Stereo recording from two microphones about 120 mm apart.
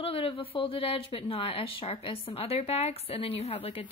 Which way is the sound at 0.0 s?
50° left (ahead or behind).